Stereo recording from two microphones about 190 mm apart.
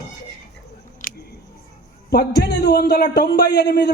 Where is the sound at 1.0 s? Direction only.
45° left (ahead or behind).